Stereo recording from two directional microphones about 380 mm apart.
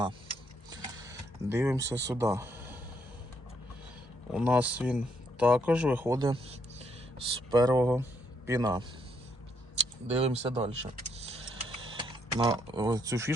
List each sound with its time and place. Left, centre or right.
0.7 s a sound: centre
2.1 s speech: centre
4.3 s a man's voice: centre
10.2 s vehicle: centre